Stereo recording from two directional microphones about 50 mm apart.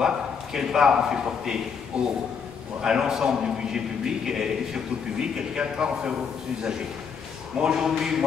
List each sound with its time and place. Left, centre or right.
0.0 s a man's voice: centre
7.5 s a man's voice: centre